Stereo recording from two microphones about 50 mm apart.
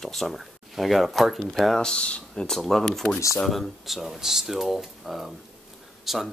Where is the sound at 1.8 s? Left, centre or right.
Centre.